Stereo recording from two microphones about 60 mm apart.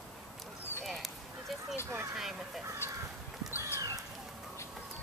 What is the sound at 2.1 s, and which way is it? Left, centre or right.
Speech, centre.